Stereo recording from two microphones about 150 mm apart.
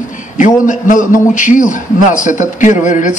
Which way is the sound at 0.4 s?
55° left (ahead or behind).